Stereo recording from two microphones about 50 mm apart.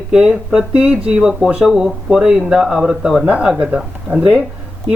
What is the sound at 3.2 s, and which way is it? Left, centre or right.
Speech, right.